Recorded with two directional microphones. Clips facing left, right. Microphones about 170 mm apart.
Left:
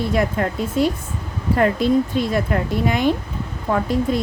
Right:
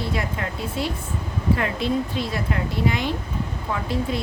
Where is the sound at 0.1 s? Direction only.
50° left (ahead or behind).